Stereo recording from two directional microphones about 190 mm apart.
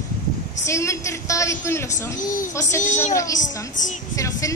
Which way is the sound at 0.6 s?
15° left (ahead or behind).